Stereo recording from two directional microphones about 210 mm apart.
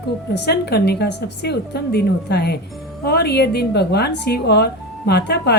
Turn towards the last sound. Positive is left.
turn(degrees=50)  # may be behind; listen again after turning